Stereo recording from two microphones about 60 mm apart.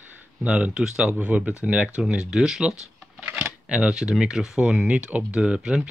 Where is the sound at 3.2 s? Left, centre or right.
Centre.